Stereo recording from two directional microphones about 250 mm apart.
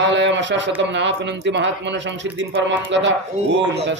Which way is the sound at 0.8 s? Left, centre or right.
Right.